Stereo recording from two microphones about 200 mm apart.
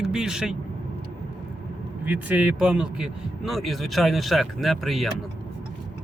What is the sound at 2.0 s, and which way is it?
Speech, 10° right (ahead or behind).